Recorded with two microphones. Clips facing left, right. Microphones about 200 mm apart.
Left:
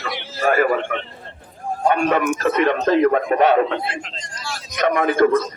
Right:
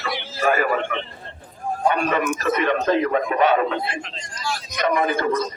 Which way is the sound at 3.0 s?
50° left (ahead or behind).